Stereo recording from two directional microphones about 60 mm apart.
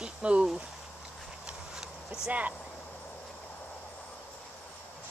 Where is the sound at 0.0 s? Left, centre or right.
Centre.